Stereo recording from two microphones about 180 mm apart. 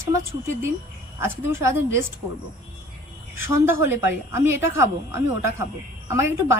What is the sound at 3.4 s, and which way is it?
Speech, 15° right (ahead or behind).